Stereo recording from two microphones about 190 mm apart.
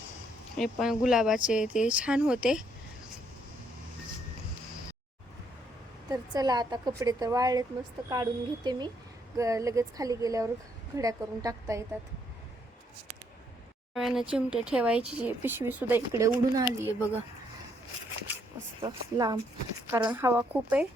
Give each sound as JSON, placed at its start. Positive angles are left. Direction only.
{"t": 0.5, "sound": "speech", "side_deg": 0}
{"t": 6.1, "sound": "a woman's voice", "side_deg": -20}
{"t": 13.9, "sound": "speech", "side_deg": 0}
{"t": 18.8, "sound": "a woman's voice", "side_deg": -20}